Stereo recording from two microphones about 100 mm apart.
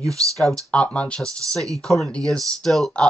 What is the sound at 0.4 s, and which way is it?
Speech, 5° left (ahead or behind).